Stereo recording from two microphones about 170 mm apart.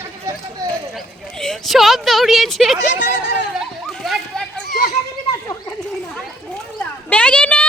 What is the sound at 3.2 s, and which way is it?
Speech, 90° left.